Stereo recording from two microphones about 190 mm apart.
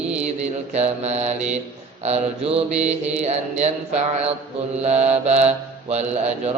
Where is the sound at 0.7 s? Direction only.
35° right (ahead or behind).